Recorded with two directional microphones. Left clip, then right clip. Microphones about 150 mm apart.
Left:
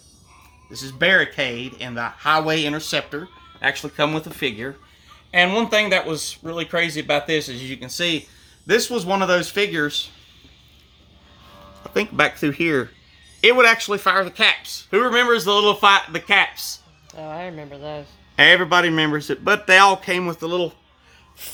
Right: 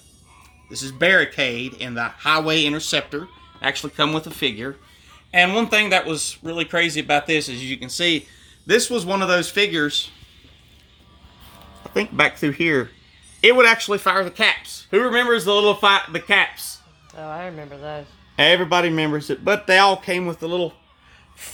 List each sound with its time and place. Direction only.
0.7 s speech: 15° left (ahead or behind)
5.3 s speech: centre (ahead or behind)
5.8 s speech: 20° left (ahead or behind)
6.4 s speech: 5° left (ahead or behind)
7.4 s speech: 30° left (ahead or behind)
12.1 s speech: centre (ahead or behind)